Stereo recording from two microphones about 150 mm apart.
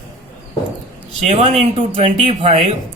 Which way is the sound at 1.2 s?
40° right (ahead or behind).